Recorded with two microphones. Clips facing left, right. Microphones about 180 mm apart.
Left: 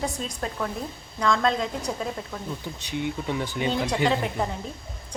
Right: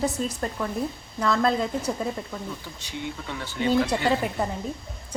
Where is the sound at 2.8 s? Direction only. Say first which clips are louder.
Left 7 dB; 20° left (ahead or behind).